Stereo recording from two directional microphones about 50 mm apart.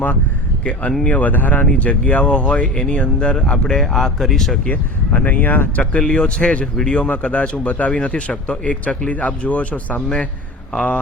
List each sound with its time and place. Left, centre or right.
1.0 s speech: left; by 4.5 s centre
4.7 s speech: left
6.0 s speech: centre